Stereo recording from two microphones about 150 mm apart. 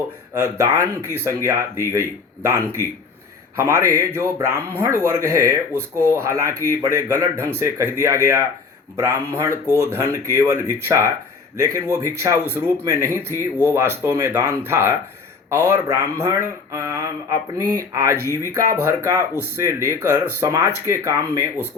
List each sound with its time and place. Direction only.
0.3 s speech: 20° right (ahead or behind)